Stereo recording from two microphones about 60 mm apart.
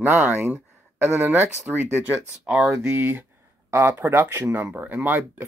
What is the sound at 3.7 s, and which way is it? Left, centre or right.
Speech, right.